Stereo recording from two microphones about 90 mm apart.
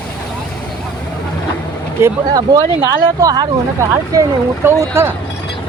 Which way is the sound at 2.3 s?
40° right (ahead or behind).